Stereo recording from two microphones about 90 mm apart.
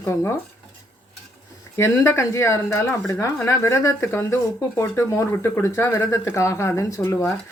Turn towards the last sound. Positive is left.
turn(degrees=30)  # may be behind; listen again after turning